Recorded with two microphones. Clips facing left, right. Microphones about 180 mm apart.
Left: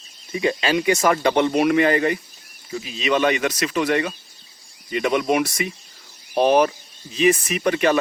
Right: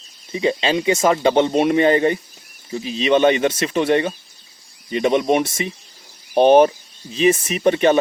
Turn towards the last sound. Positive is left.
turn(degrees=-25)  # may be behind; listen again after turning